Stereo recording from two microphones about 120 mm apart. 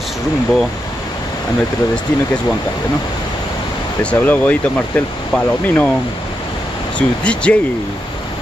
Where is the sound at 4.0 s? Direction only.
10° left (ahead or behind).